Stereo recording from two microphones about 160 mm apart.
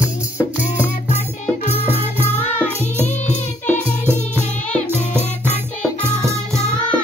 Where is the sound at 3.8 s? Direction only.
15° right (ahead or behind).